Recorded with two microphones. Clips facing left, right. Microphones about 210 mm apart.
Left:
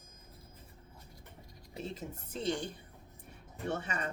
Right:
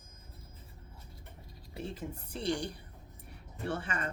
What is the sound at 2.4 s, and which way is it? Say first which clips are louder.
Speech: right 1 dB; 20° left (ahead or behind).